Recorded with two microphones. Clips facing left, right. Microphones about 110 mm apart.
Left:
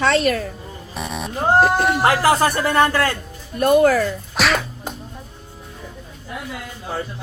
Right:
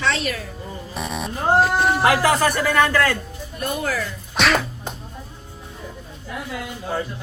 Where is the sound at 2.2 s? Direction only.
30° left (ahead or behind).